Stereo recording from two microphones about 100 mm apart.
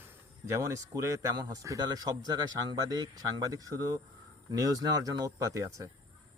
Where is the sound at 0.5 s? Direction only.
30° right (ahead or behind).